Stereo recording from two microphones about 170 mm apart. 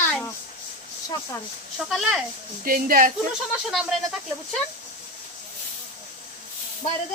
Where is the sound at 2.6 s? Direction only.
55° right (ahead or behind).